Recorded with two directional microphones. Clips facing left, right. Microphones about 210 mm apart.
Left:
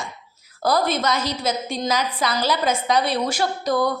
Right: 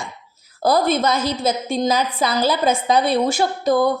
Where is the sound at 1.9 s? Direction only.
30° right (ahead or behind).